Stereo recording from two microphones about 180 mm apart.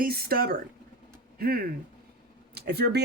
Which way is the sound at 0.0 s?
55° right (ahead or behind).